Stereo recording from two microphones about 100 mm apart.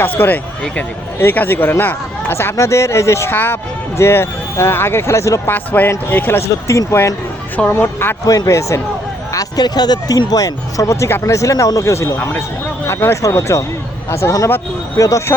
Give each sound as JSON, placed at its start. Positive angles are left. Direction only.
{"t": 0.2, "sound": "speech", "side_deg": 20}
{"t": 5.5, "sound": "speech", "side_deg": 20}
{"t": 7.5, "sound": "speech", "side_deg": 20}
{"t": 8.2, "sound": "speech", "side_deg": 35}